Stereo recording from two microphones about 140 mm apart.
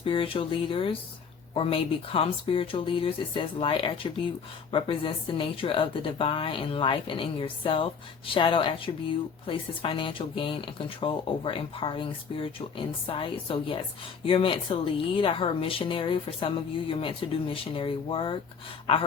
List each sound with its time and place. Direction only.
0.0 s a woman's voice: 40° left (ahead or behind)